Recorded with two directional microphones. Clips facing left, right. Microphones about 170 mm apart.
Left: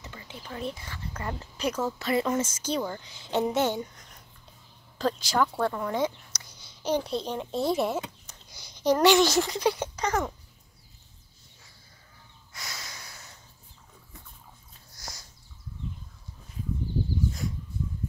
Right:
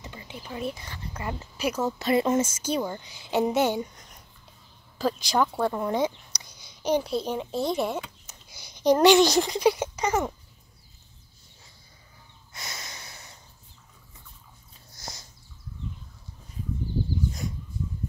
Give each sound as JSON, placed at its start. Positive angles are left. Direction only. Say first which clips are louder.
{"t": 0.0, "sound": "speech", "louder": "right 2 dB", "side_deg": -15}
{"t": 2.4, "sound": "speech", "louder": "right 2 dB", "side_deg": -10}
{"t": 8.3, "sound": "a sound", "louder": "right 1 dB", "side_deg": -10}
{"t": 8.9, "sound": "speech", "louder": "right 3 dB", "side_deg": -15}
{"t": 12.5, "sound": "snort", "louder": "right 1 dB", "side_deg": -20}
{"t": 15.0, "sound": "sniff", "louder": "right 2 dB", "side_deg": -25}